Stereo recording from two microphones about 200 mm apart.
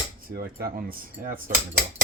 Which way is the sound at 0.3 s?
45° right (ahead or behind).